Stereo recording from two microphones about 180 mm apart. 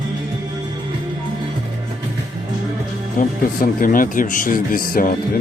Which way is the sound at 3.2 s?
50° left (ahead or behind).